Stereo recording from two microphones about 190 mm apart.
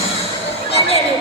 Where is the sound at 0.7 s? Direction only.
30° left (ahead or behind).